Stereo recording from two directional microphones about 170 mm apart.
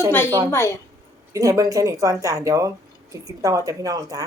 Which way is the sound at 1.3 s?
20° right (ahead or behind).